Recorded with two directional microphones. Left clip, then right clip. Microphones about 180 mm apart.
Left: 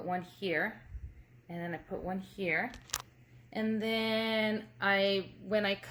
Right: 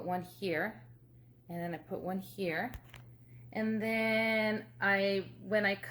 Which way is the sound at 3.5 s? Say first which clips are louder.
Left 1 dB; 15° left (ahead or behind).